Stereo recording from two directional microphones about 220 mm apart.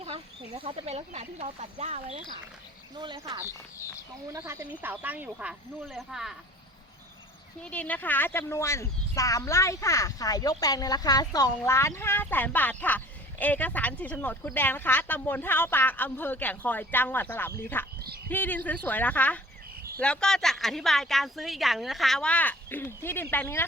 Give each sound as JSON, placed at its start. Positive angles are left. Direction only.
{"t": 0.0, "sound": "speech", "side_deg": -25}
{"t": 4.3, "sound": "speech", "side_deg": -10}
{"t": 7.6, "sound": "speech", "side_deg": 5}